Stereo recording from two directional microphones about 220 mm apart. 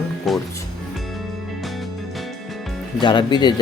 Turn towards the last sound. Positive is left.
turn(degrees=20)  # may be behind; listen again after turning